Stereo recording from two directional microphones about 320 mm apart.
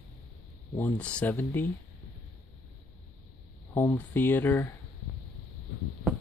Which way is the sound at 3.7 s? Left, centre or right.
Centre.